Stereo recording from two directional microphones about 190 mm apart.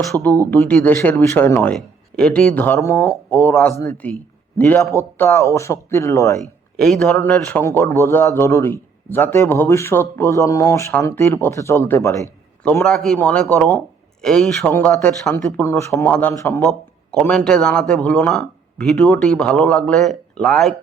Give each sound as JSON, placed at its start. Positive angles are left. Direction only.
{"t": 0.5, "sound": "a man's voice", "side_deg": 10}
{"t": 6.7, "sound": "a man's voice", "side_deg": 5}